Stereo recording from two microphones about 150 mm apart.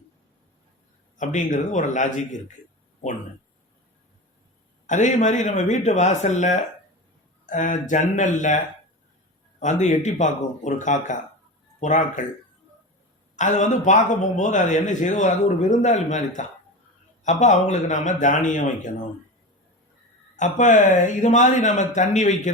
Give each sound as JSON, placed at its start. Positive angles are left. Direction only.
{"t": 1.2, "sound": "speech", "side_deg": 55}
{"t": 4.9, "sound": "a man's voice", "side_deg": 55}
{"t": 9.6, "sound": "a man's voice", "side_deg": 55}
{"t": 13.3, "sound": "a man's voice", "side_deg": 55}
{"t": 20.3, "sound": "speech", "side_deg": 55}